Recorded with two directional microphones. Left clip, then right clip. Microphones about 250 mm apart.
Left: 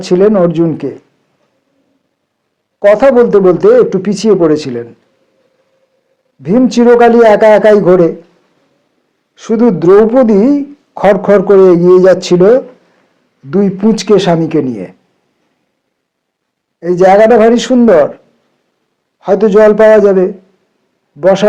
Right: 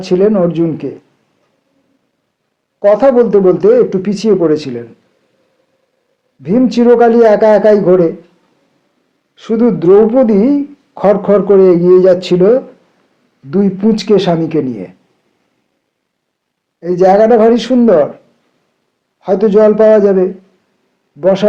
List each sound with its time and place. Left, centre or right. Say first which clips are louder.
0.0 s speech: left 3 dB; left
2.8 s speech: left 2 dB; left
6.4 s speech: left 2 dB; left
9.3 s speech: left 2 dB; left
16.8 s speech: left 2 dB; left
19.2 s speech: left 2 dB; left